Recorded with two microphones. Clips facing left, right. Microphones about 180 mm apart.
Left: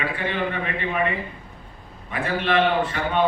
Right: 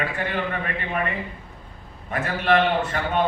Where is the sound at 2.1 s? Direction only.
45° right (ahead or behind).